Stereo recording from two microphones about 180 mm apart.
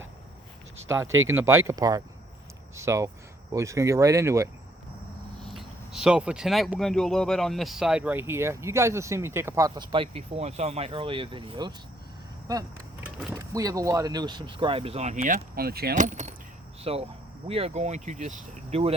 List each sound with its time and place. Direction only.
1.3 s speech: 15° right (ahead or behind)
5.4 s speech: centre (ahead or behind); by 12.6 s 20° right (ahead or behind)
13.0 s vehicle: 5° right (ahead or behind)
13.3 s speech: 20° right (ahead or behind); by 15.4 s 45° right (ahead or behind)
15.5 s speech: 60° right (ahead or behind)
16.0 s speech: 40° right (ahead or behind)